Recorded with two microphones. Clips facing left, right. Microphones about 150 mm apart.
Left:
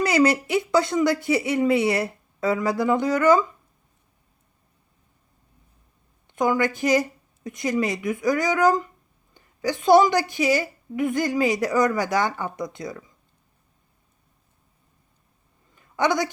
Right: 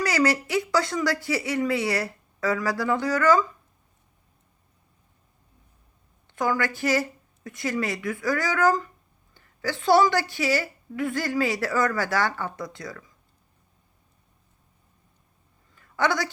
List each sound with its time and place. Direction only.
0.0 s a woman's voice: 20° left (ahead or behind)
6.2 s a woman's voice: 20° left (ahead or behind)
15.7 s a sound: 20° left (ahead or behind)